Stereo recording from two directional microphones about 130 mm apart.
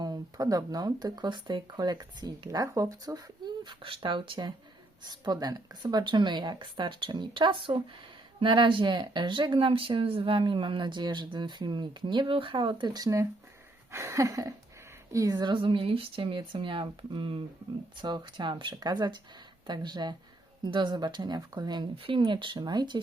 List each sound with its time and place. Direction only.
0.0 s speech: 30° right (ahead or behind)
13.9 s a sound: 20° right (ahead or behind)
15.1 s speech: 25° right (ahead or behind)